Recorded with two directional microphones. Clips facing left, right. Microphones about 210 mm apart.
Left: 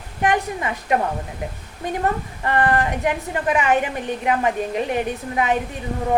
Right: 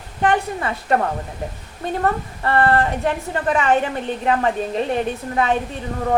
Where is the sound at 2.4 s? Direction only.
15° left (ahead or behind).